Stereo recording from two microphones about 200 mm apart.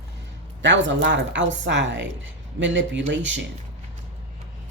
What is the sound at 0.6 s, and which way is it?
Speech, 65° right (ahead or behind).